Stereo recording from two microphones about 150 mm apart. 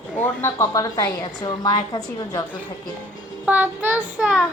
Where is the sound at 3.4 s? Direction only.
10° right (ahead or behind).